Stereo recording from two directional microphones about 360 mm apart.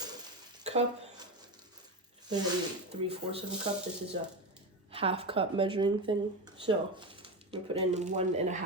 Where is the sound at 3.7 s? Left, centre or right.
Centre.